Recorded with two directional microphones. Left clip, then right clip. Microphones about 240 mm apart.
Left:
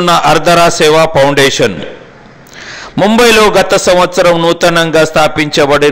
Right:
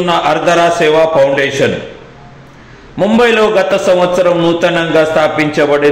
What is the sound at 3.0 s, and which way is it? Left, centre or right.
A man's voice, left.